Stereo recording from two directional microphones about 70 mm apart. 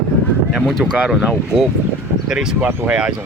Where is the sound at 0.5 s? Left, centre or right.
Centre.